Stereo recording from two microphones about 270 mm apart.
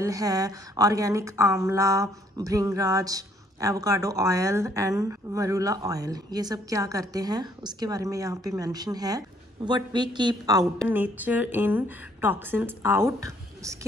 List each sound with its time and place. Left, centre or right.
0.0 s a woman's voice: centre